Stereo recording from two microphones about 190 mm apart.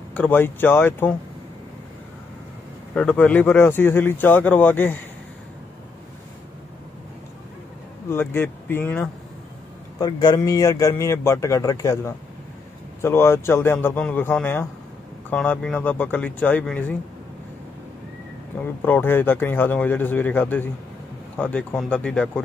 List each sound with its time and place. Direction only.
0.1 s a man's voice: 10° left (ahead or behind)
2.9 s a man's voice: 5° left (ahead or behind)
8.1 s a man's voice: 10° left (ahead or behind)
9.9 s a man's voice: 20° left (ahead or behind)
18.9 s a man's voice: 10° left (ahead or behind)